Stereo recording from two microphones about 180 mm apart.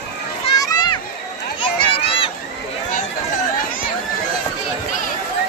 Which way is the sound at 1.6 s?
30° left (ahead or behind).